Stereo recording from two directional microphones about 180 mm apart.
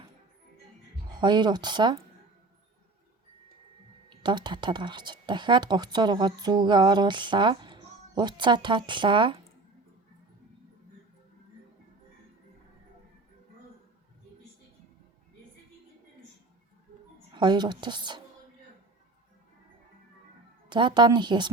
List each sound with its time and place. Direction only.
1.1 s speech: 25° right (ahead or behind)
4.2 s speech: 25° right (ahead or behind)
17.3 s speech: 25° right (ahead or behind)
20.7 s speech: 25° right (ahead or behind)